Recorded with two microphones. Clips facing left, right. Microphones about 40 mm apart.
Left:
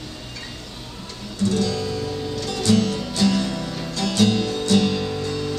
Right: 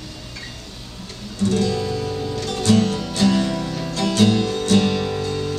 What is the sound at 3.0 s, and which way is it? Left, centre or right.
Music, centre.